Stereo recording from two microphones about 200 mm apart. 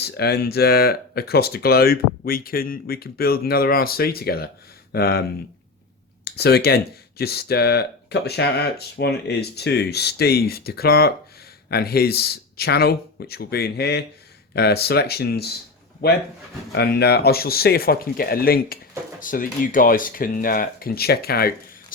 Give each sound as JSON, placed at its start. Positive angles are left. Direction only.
{"t": 0.0, "sound": "speech", "side_deg": 55}
{"t": 6.2, "sound": "speech", "side_deg": 55}
{"t": 16.7, "sound": "speech", "side_deg": 55}